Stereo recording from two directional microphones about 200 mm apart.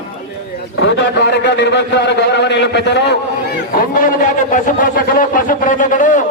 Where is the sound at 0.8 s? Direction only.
60° left (ahead or behind).